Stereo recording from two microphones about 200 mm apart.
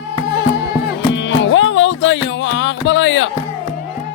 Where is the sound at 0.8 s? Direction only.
65° left (ahead or behind).